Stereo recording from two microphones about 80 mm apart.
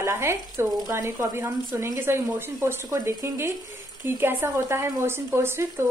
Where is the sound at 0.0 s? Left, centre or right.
Right.